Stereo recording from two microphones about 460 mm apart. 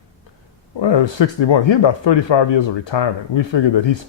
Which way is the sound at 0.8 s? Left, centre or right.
Left.